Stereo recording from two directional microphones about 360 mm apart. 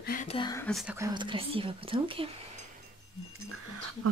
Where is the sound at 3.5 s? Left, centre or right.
Right.